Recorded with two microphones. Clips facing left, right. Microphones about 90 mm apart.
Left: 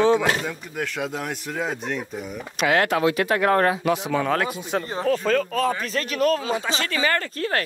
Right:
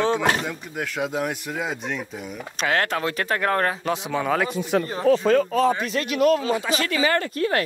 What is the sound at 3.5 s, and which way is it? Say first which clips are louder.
Speech: left 3 dB; 40° left (ahead or behind).